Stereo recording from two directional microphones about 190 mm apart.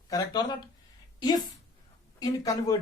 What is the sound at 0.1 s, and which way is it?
Speech, 20° left (ahead or behind).